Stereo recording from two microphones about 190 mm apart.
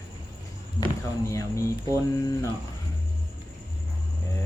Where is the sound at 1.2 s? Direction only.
15° left (ahead or behind).